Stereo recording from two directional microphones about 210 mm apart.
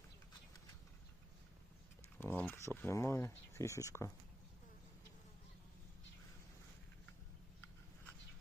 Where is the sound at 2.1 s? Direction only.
10° left (ahead or behind).